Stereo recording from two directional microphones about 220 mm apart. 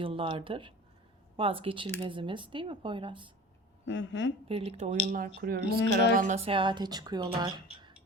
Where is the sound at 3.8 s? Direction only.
55° left (ahead or behind).